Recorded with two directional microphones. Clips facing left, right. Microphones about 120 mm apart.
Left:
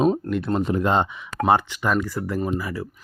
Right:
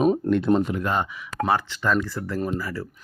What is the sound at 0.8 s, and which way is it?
Speech, 25° left (ahead or behind).